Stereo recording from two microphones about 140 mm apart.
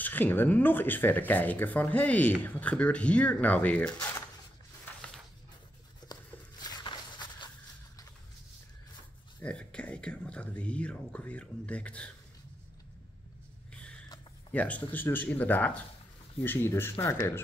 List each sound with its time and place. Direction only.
0.0 s speech: 15° left (ahead or behind)
6.1 s a sound: 30° left (ahead or behind)
9.4 s speech: 10° left (ahead or behind)
14.5 s speech: 10° left (ahead or behind)